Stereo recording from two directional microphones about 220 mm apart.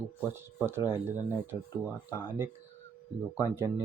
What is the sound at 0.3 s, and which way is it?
Speech, 10° right (ahead or behind).